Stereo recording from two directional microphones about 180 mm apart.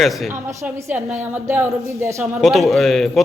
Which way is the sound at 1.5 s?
15° right (ahead or behind).